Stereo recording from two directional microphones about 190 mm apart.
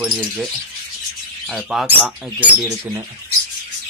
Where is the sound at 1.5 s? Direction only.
Centre (ahead or behind).